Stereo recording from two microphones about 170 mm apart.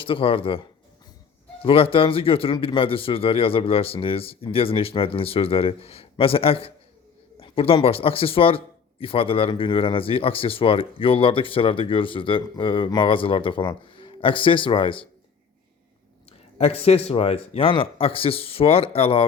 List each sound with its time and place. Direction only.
0.0 s speech: 30° left (ahead or behind)
1.6 s speech: 30° left (ahead or behind)
16.6 s speech: 35° left (ahead or behind)